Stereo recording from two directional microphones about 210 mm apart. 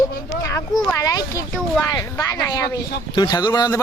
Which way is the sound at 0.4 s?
15° left (ahead or behind).